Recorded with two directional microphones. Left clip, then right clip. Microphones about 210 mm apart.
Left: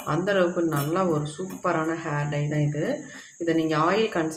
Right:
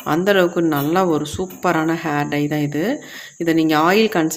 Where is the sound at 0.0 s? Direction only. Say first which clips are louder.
Right 7 dB; 50° right (ahead or behind).